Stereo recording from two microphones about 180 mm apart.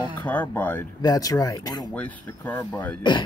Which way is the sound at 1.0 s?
20° left (ahead or behind).